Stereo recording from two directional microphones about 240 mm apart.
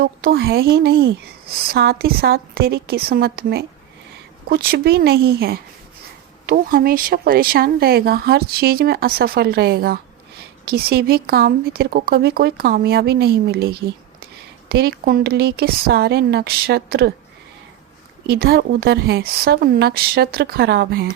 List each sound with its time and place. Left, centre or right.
0.0 s a woman's voice: right
18.3 s a woman's voice: right